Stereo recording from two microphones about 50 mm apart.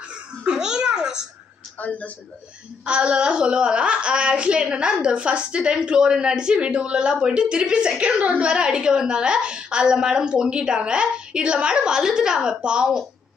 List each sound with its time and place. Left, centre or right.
0.5 s a sound: centre
1.8 s speech: left
2.8 s a woman's voice: centre